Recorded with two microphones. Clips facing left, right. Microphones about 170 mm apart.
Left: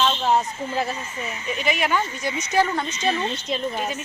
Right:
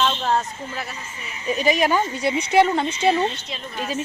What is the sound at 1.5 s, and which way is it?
Speech, 35° right (ahead or behind).